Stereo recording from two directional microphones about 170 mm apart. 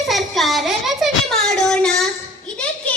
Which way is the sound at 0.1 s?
Centre (ahead or behind).